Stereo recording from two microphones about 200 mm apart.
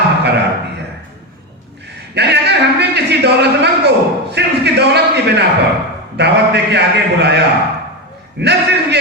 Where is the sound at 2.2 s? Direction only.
55° right (ahead or behind).